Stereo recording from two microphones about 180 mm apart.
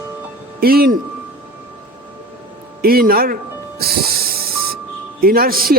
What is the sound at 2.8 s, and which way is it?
Music, 55° right (ahead or behind).